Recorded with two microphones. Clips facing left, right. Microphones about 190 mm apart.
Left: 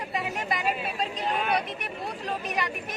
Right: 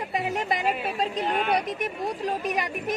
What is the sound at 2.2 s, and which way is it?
Speech, 15° right (ahead or behind).